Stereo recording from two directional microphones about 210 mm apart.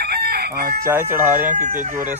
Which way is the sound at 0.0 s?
50° right (ahead or behind).